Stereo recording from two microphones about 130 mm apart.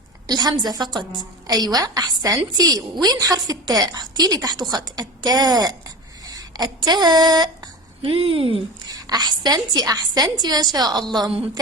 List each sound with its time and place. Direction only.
0.3 s a woman's voice: 30° right (ahead or behind)
8.9 s a woman's voice: 30° right (ahead or behind)
11.2 s a man's voice: 45° right (ahead or behind)